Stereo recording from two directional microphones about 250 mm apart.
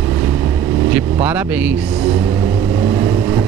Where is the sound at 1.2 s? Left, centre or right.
Centre.